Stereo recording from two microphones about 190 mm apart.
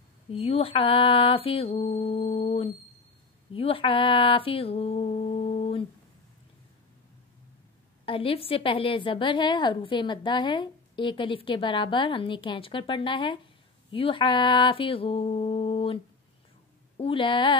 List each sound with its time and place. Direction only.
0.3 s mantra: 30° left (ahead or behind)
8.0 s a woman's voice: 30° left (ahead or behind)